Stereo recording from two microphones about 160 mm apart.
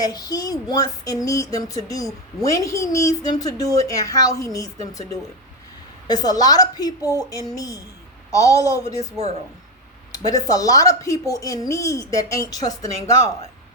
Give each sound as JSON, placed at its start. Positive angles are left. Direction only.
{"t": 0.0, "sound": "a woman's voice", "side_deg": 25}
{"t": 6.1, "sound": "a woman's voice", "side_deg": 25}
{"t": 10.1, "sound": "a woman's voice", "side_deg": 20}